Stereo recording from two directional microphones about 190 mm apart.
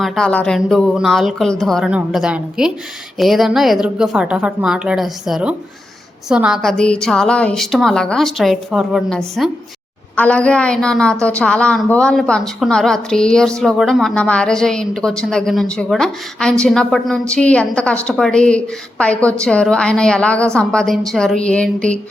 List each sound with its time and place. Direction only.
0.0 s a woman's voice: centre (ahead or behind)